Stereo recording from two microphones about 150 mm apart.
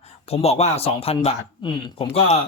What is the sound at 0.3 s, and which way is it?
Speech, 45° left (ahead or behind).